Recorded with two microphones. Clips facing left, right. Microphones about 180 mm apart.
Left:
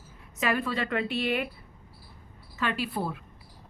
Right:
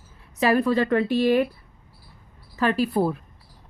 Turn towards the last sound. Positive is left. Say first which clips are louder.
# right 9 dB
turn(degrees=-40)  # may be behind; listen again after turning